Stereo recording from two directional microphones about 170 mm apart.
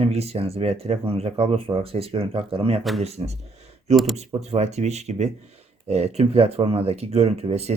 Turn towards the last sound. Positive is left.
turn(degrees=-40)  # may be behind; listen again after turning